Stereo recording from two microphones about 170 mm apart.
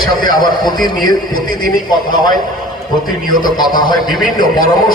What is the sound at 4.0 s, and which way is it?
Speech, centre (ahead or behind).